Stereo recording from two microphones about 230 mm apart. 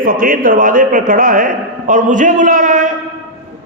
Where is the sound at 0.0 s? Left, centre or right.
Right.